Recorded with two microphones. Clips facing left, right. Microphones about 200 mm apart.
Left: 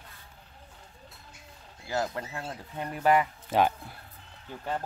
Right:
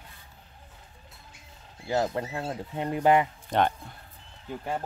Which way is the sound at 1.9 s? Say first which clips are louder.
Right 4 dB; 25° right (ahead or behind).